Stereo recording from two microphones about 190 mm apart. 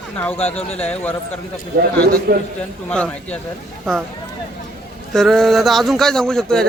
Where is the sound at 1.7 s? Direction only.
50° right (ahead or behind).